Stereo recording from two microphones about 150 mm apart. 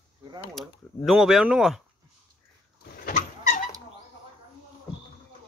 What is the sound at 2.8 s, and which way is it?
Vehicle, 65° left (ahead or behind).